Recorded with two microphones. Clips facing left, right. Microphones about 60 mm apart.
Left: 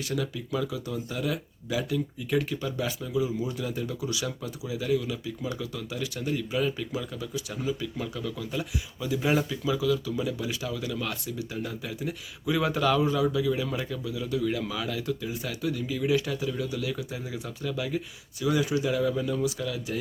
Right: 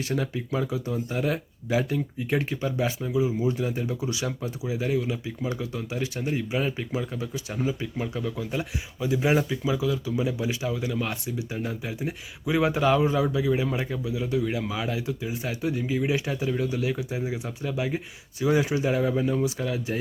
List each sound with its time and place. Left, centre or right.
0.0 s speech: right